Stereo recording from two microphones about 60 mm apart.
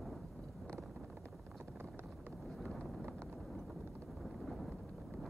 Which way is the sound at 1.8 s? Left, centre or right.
Right.